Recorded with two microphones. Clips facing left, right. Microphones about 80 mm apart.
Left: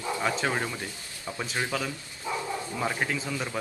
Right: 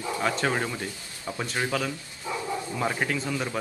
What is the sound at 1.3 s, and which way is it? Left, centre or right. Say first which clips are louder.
Speech: right 2 dB; centre.